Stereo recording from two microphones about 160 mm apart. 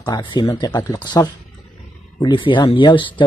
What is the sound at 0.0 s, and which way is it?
Speech, 25° left (ahead or behind).